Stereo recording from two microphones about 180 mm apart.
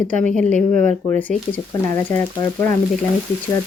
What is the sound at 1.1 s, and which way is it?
Speech, 10° left (ahead or behind).